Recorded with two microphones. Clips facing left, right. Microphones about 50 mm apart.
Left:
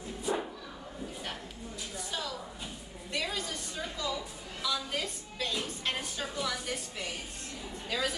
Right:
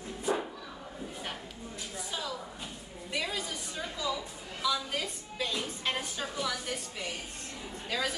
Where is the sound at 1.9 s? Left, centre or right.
Centre.